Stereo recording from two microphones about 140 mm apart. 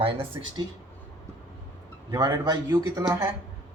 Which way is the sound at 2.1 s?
25° right (ahead or behind).